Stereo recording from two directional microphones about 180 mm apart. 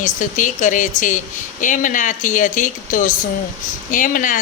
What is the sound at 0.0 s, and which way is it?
A woman's voice, 45° left (ahead or behind).